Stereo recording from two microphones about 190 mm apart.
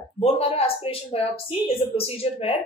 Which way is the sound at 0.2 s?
30° left (ahead or behind).